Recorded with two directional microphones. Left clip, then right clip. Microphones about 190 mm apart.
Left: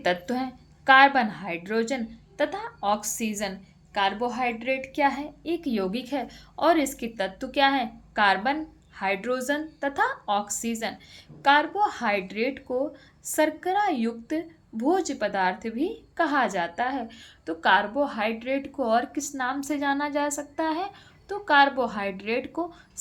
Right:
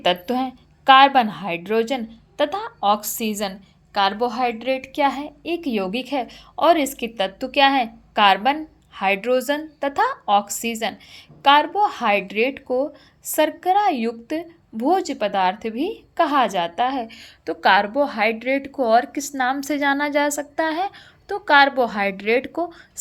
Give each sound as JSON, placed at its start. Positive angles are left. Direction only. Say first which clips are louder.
{"t": 0.0, "sound": "a woman's voice", "louder": "right 6 dB", "side_deg": -30}